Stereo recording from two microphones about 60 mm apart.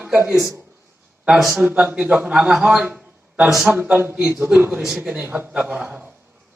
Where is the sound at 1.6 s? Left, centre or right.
Right; by 3.7 s centre.